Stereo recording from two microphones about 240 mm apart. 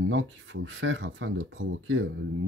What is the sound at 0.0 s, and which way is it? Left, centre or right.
Speech, right.